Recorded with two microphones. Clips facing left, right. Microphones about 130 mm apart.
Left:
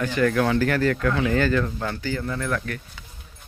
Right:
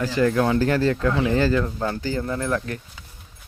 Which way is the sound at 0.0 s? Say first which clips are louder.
Right 1 dB; 30° right (ahead or behind).